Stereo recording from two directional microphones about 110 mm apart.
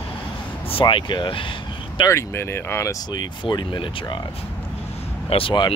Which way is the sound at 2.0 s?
25° left (ahead or behind).